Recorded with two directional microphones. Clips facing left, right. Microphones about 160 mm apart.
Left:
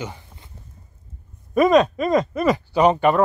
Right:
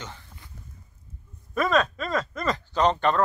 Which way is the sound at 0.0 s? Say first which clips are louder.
Left 8 dB; 15° left (ahead or behind).